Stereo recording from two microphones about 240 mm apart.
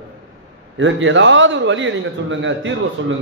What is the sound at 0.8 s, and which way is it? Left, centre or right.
A man's voice, right.